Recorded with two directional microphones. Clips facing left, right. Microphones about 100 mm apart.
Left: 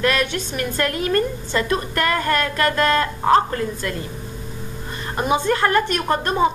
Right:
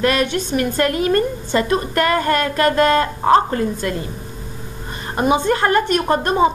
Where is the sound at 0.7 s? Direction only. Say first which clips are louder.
Right 2 dB; 15° right (ahead or behind).